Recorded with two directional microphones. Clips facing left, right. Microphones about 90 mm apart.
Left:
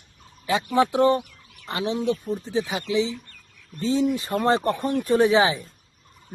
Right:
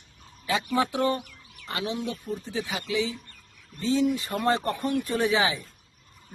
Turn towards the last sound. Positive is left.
turn(degrees=30)  # may be behind; listen again after turning